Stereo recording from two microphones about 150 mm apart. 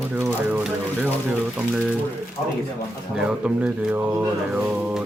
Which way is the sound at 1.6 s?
5° right (ahead or behind).